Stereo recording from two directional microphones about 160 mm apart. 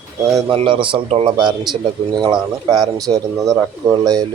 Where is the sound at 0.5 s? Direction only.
35° right (ahead or behind).